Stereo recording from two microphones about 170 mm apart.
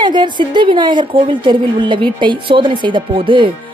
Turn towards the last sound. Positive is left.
turn(degrees=-30)  # may be behind; listen again after turning